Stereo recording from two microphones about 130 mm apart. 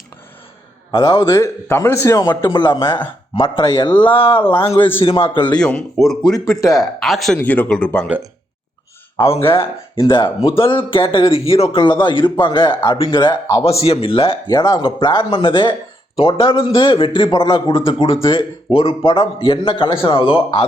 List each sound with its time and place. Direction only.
0.9 s a man's voice: 30° left (ahead or behind)
5.5 s speech: 5° left (ahead or behind)
7.3 s speech: 15° left (ahead or behind)
9.1 s a man's voice: 45° left (ahead or behind)
13.7 s a man's voice: 50° left (ahead or behind)
14.4 s a man's voice: 30° left (ahead or behind)